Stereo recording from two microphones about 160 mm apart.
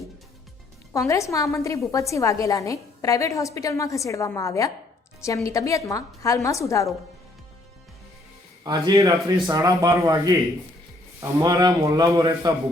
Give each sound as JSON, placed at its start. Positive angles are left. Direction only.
{"t": 0.9, "sound": "a woman's voice", "side_deg": 20}
{"t": 8.6, "sound": "a man's voice", "side_deg": -20}